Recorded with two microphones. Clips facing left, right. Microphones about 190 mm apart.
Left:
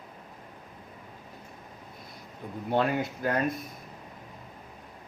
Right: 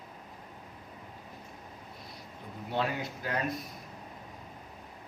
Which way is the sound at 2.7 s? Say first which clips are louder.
Left 6 dB; 50° left (ahead or behind).